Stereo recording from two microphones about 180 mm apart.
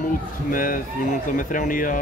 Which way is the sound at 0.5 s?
50° left (ahead or behind).